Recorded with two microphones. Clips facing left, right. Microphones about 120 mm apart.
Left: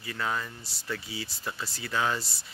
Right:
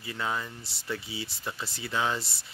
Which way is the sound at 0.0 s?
20° right (ahead or behind).